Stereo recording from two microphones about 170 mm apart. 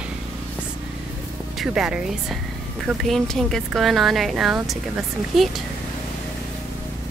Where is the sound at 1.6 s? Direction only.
5° right (ahead or behind).